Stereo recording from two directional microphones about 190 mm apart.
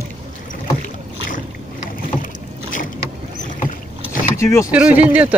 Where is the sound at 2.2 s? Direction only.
45° left (ahead or behind).